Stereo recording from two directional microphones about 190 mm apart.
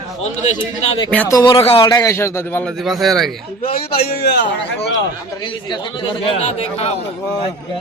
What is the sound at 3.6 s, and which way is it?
Speech, 50° left (ahead or behind).